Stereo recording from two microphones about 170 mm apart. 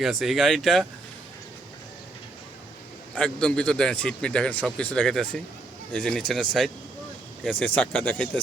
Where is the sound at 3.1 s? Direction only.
5° left (ahead or behind).